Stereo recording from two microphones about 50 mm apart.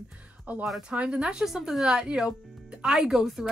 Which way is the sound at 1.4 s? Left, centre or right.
Centre.